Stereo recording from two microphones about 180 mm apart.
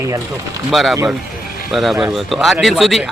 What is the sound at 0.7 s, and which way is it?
Speech, centre (ahead or behind).